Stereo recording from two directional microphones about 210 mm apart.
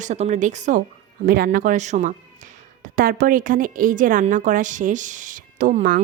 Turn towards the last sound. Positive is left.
turn(degrees=-40)  # may be behind; listen again after turning